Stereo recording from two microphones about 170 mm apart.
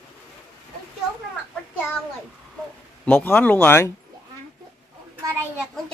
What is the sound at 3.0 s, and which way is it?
Speech, 10° left (ahead or behind).